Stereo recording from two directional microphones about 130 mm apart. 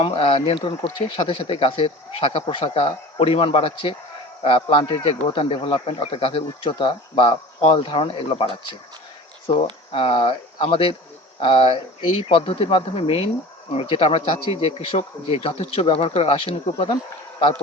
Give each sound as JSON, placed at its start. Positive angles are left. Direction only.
{"t": 0.0, "sound": "speech", "side_deg": 45}